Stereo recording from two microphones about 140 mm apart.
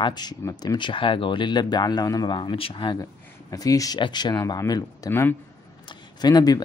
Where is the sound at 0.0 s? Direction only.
30° left (ahead or behind).